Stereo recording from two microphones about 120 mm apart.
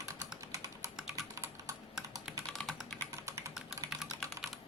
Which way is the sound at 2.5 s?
5° left (ahead or behind).